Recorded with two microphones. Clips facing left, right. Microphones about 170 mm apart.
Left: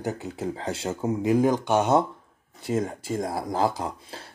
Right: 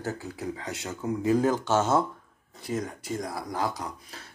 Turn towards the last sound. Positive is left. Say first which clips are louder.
# left 5 dB
turn(degrees=30)  # may be behind; listen again after turning